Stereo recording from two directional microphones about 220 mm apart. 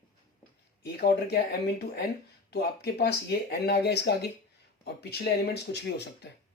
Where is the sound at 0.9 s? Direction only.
45° left (ahead or behind).